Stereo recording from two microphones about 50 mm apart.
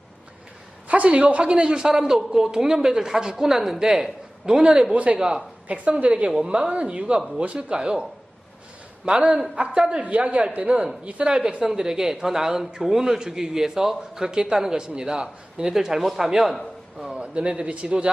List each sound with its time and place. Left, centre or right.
0.9 s a man's voice: right
5.6 s a woman's voice: right
9.7 s a man's voice: centre
10.0 s a woman's voice: right; by 16.6 s centre
16.6 s a sound: centre
17.2 s a woman's voice: right